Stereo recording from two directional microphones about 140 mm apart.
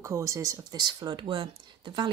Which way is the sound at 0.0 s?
20° right (ahead or behind).